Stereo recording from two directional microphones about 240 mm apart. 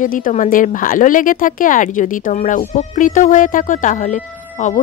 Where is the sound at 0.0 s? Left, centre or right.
Left.